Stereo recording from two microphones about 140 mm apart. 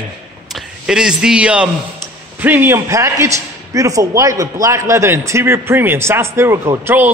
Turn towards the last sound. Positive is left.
turn(degrees=-15)  # may be behind; listen again after turning